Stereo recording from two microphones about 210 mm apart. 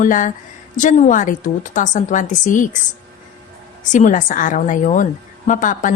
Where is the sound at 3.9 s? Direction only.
40° left (ahead or behind).